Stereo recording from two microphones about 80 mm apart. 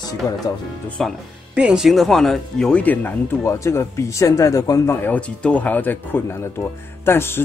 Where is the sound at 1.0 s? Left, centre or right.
Centre.